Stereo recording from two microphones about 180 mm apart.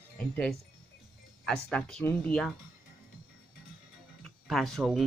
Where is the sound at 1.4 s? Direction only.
Centre (ahead or behind).